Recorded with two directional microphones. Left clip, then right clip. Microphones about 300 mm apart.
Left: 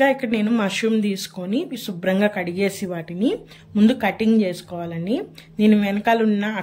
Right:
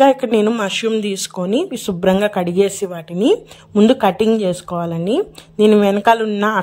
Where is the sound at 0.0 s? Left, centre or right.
Centre.